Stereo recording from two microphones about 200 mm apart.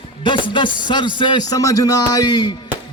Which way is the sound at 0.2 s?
25° left (ahead or behind).